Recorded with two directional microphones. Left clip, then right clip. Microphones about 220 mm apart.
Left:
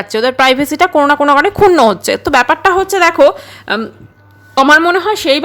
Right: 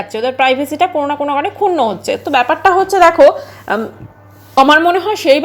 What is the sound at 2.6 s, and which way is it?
A woman's voice, 15° left (ahead or behind).